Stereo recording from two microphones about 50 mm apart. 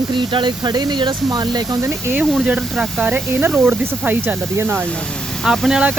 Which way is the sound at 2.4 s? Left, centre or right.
Right.